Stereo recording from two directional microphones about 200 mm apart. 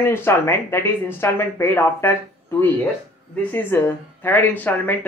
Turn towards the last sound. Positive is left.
turn(degrees=10)  # may be behind; listen again after turning